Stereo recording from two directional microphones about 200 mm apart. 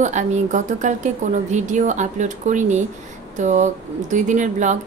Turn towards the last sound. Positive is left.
turn(degrees=-35)  # may be behind; listen again after turning